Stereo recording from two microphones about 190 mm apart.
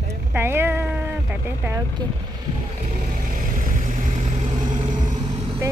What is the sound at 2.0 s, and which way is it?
Speech, 20° right (ahead or behind).